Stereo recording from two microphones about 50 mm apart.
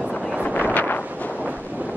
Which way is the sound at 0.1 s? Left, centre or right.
Centre.